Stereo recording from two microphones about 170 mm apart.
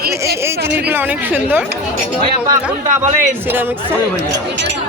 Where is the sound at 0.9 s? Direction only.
10° right (ahead or behind).